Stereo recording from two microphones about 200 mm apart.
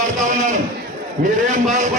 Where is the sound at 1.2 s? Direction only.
45° right (ahead or behind).